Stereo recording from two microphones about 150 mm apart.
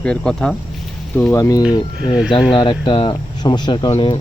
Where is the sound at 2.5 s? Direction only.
35° left (ahead or behind).